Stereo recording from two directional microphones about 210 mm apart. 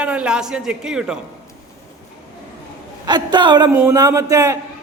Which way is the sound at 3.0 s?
20° right (ahead or behind).